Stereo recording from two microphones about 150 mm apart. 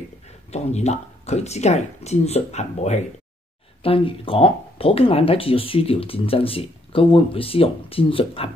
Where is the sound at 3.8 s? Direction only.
35° left (ahead or behind).